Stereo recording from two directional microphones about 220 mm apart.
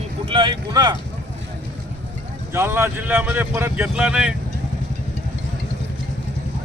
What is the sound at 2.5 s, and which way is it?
Speech, 10° right (ahead or behind).